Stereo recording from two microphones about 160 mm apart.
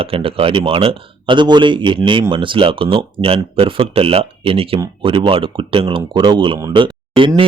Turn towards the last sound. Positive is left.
turn(degrees=-35)  # may be behind; listen again after turning